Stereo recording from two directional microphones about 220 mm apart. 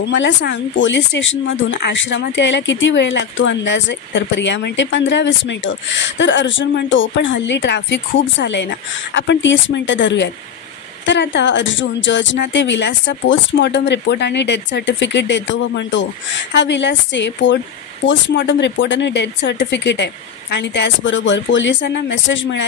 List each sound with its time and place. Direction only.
0.0 s a woman's voice: 55° left (ahead or behind)